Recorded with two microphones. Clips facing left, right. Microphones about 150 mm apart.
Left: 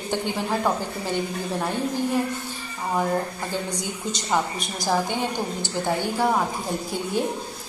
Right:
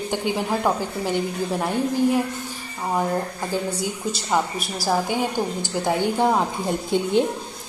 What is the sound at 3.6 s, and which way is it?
A woman's voice, 5° right (ahead or behind).